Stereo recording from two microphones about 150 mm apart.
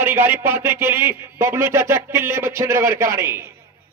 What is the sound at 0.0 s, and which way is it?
A man's voice, 15° right (ahead or behind).